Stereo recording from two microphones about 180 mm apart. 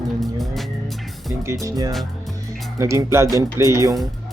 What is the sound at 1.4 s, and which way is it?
Speech, 15° right (ahead or behind).